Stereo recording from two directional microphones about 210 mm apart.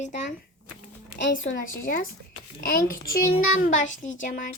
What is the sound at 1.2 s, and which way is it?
Speech, 60° left (ahead or behind).